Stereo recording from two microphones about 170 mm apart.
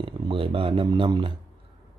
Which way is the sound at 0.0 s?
30° right (ahead or behind).